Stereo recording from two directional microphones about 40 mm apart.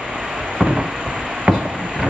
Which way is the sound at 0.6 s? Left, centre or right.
Centre.